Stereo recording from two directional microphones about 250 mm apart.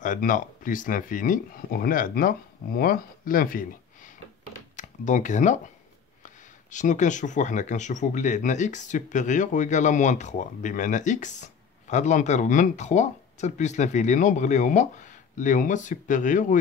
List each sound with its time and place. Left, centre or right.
0.0 s speech: left